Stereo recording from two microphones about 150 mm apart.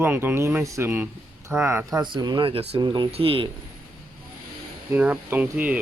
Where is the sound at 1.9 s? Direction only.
30° right (ahead or behind).